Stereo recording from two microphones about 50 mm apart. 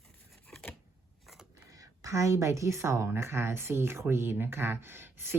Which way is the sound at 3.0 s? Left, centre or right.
Right.